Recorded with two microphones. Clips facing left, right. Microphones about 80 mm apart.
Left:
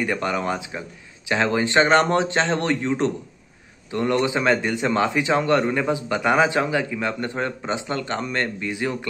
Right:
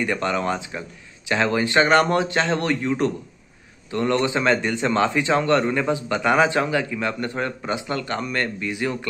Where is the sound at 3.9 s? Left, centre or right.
Centre.